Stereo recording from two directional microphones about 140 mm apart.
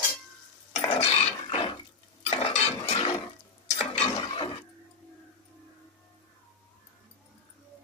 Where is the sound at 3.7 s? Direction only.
45° left (ahead or behind).